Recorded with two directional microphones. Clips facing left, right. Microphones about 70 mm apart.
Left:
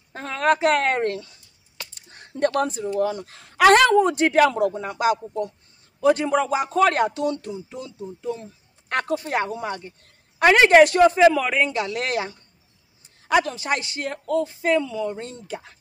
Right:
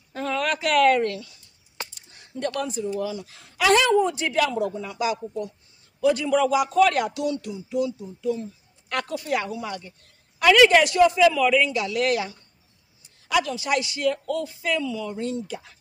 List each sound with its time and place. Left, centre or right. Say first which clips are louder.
0.1 s speech: left 4 dB; left